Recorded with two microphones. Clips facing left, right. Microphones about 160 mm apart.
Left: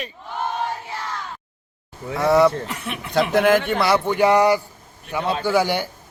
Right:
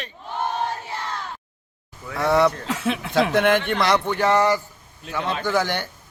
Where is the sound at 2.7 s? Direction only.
90° right.